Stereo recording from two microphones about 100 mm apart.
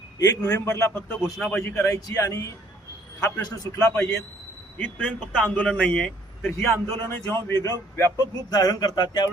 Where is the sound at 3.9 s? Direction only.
25° left (ahead or behind).